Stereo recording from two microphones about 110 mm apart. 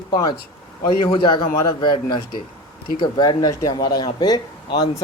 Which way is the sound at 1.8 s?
45° left (ahead or behind).